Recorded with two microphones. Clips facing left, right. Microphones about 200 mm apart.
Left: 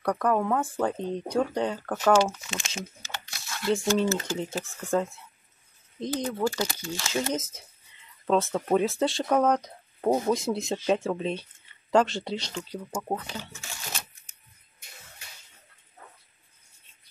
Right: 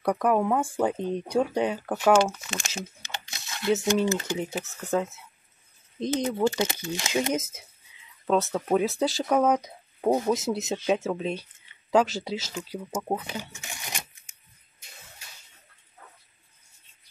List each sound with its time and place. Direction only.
0.0 s speech: 10° right (ahead or behind)
3.0 s a sound: 20° right (ahead or behind)
4.4 s speech: 15° right (ahead or behind)
4.6 s speech: 5° right (ahead or behind)
5.9 s speech: 20° right (ahead or behind); by 12.8 s 5° right (ahead or behind)
13.1 s shuffling cards: 15° right (ahead or behind)